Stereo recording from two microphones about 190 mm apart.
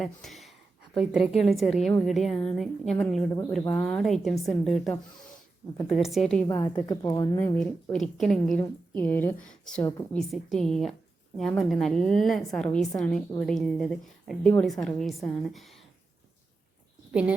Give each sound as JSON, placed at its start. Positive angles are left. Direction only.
{"t": 0.0, "sound": "a woman's voice", "side_deg": 0}
{"t": 6.8, "sound": "a woman's voice", "side_deg": 20}
{"t": 7.9, "sound": "a woman's voice", "side_deg": 0}